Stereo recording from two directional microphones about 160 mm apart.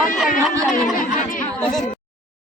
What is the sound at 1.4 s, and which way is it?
Speech, 5° left (ahead or behind).